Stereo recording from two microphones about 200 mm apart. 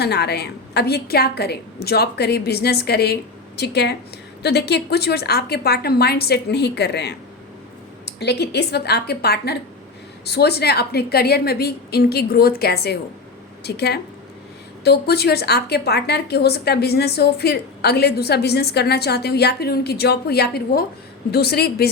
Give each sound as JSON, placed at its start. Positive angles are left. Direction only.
{"t": 0.0, "sound": "a woman's voice", "side_deg": 55}